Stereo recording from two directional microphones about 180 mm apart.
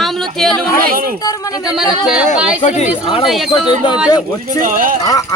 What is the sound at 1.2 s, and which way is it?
Speech, 20° left (ahead or behind).